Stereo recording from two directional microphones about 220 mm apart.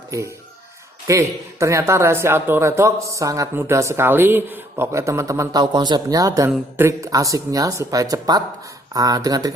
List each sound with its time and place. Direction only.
1.0 s speech: 15° right (ahead or behind)